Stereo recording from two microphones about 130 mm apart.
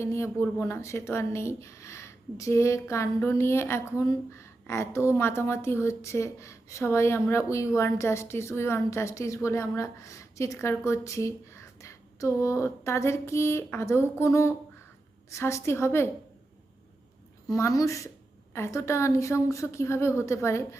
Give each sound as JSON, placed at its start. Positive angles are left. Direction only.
{"t": 0.0, "sound": "a woman's voice", "side_deg": 20}
{"t": 17.5, "sound": "a woman's voice", "side_deg": 25}